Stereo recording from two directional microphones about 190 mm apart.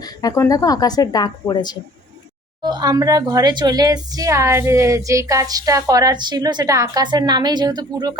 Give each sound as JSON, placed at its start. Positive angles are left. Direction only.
{"t": 0.0, "sound": "a woman's voice", "side_deg": 20}
{"t": 2.6, "sound": "speech", "side_deg": -20}